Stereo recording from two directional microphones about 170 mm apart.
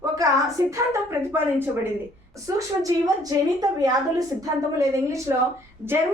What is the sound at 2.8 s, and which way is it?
A woman's voice, 20° right (ahead or behind).